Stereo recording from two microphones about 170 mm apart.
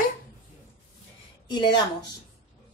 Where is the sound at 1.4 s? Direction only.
25° left (ahead or behind).